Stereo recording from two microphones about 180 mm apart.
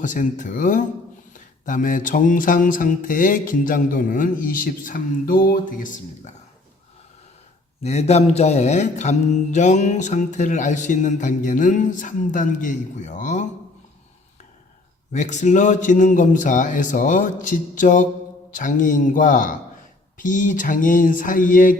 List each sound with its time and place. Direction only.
0.0 s mantra: 45° left (ahead or behind)
7.9 s mantra: 35° left (ahead or behind)
15.1 s mantra: 40° left (ahead or behind)